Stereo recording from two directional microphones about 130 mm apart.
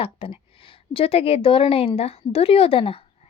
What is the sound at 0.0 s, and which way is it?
A woman's voice, 45° left (ahead or behind).